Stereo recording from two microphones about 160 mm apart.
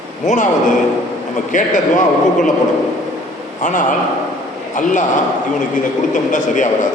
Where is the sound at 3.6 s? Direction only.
55° left (ahead or behind).